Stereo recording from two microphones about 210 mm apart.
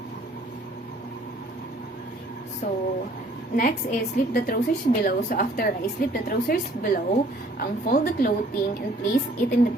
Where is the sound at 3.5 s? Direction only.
40° left (ahead or behind).